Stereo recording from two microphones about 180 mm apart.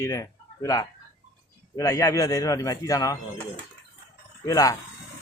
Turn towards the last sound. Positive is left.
turn(degrees=20)  # may be behind; listen again after turning